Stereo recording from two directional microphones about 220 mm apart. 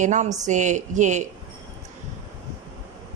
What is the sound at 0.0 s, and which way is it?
A woman's voice, 35° right (ahead or behind).